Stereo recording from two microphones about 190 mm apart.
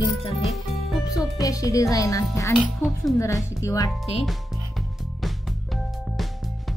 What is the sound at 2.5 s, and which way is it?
Speech, centre (ahead or behind).